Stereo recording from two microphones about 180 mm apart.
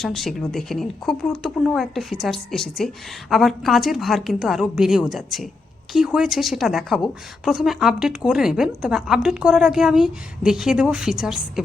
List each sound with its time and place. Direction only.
0.0 s a woman's voice: centre (ahead or behind)